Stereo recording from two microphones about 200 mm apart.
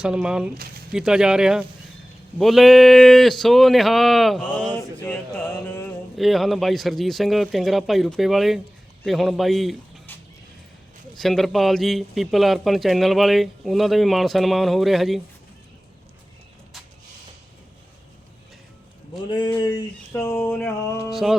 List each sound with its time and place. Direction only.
0.0 s speech: 5° right (ahead or behind)
4.7 s mantra: 10° left (ahead or behind)
6.1 s speech: centre (ahead or behind)
11.1 s speech: centre (ahead or behind)
19.3 s a sound: 25° left (ahead or behind)
21.1 s speech: centre (ahead or behind)